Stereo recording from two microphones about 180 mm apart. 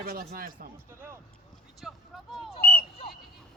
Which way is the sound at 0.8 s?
15° right (ahead or behind).